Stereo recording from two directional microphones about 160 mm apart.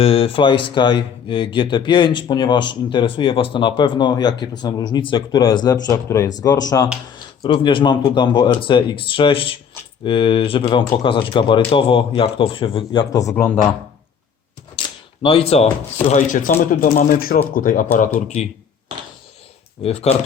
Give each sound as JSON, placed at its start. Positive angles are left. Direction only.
{"t": 0.0, "sound": "speech", "side_deg": 35}
{"t": 13.3, "sound": "speech", "side_deg": 10}
{"t": 14.8, "sound": "speech", "side_deg": 35}
{"t": 19.8, "sound": "speech", "side_deg": 40}